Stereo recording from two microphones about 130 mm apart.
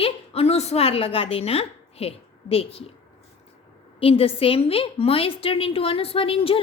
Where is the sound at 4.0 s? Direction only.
45° left (ahead or behind).